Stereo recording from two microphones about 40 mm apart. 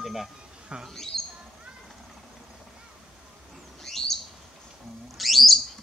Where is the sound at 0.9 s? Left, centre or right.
Centre.